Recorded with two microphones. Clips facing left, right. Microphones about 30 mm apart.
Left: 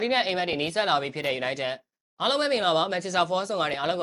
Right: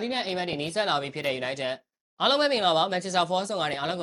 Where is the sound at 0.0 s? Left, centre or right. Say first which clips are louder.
Left 4 dB; centre.